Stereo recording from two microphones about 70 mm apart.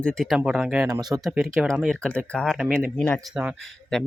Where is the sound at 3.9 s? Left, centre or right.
Centre.